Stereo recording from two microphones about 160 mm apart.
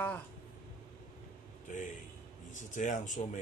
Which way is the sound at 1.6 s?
50° left (ahead or behind).